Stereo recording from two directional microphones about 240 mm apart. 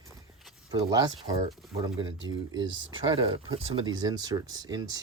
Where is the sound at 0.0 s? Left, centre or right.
Centre.